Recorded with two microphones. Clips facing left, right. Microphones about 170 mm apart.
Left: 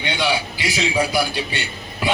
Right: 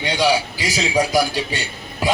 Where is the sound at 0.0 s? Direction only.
40° right (ahead or behind).